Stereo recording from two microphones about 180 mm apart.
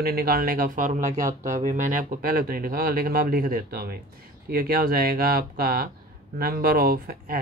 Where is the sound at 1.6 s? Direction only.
45° right (ahead or behind).